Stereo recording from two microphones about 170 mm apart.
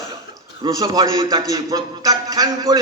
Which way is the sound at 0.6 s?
25° right (ahead or behind).